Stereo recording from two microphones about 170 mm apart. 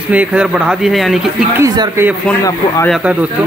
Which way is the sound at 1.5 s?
15° right (ahead or behind).